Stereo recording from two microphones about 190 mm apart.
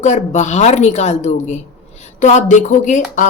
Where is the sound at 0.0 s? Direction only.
40° left (ahead or behind).